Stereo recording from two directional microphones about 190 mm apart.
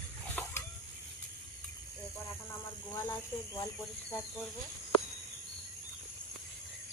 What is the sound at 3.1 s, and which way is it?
Speech, 15° left (ahead or behind).